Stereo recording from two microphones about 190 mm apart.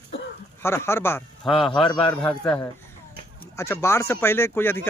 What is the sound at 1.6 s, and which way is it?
Speech, 25° left (ahead or behind).